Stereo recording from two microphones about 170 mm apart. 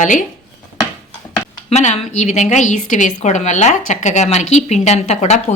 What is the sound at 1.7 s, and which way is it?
A woman's voice, 40° left (ahead or behind).